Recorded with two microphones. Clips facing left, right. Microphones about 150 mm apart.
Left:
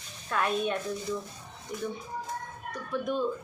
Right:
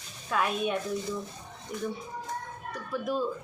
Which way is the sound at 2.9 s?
5° right (ahead or behind).